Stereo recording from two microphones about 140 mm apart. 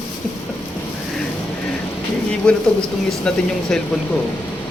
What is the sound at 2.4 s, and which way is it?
Speech, 5° left (ahead or behind).